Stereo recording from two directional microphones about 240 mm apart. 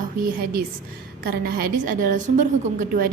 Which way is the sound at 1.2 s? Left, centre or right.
Right.